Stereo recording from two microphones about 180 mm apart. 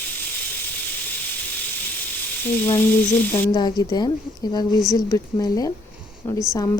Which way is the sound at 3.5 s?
25° left (ahead or behind).